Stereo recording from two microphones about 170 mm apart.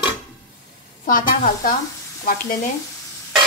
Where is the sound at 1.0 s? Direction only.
55° left (ahead or behind).